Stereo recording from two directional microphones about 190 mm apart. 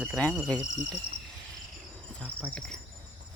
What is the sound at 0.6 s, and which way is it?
Speech, 5° right (ahead or behind).